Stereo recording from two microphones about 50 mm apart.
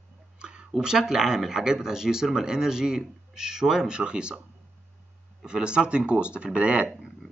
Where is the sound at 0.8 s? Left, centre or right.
Centre.